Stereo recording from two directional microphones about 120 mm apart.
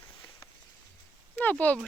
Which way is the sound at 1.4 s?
15° left (ahead or behind).